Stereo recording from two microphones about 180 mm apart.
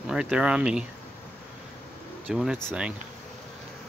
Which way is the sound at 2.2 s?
5° right (ahead or behind).